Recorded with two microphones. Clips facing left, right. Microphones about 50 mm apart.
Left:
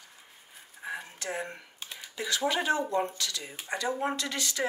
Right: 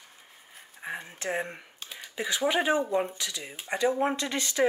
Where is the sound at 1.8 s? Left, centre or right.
Centre.